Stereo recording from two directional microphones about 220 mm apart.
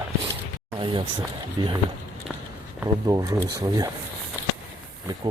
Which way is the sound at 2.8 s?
15° right (ahead or behind).